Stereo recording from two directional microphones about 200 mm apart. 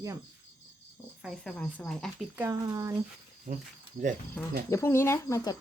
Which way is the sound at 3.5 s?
40° right (ahead or behind).